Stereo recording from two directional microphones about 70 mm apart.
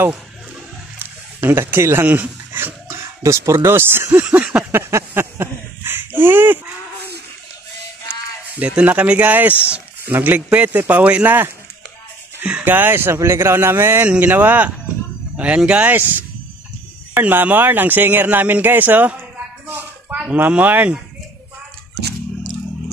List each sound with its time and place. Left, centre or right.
0.9 s a sound: right
2.0 s dog: right
3.0 s speech: right
4.2 s speech: right
4.6 s speech: right
8.5 s speech: centre
12.6 s speech: right
19.7 s a sound: right
20.2 s speech: right